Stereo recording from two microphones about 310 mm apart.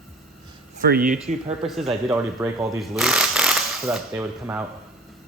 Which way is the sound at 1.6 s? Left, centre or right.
Centre.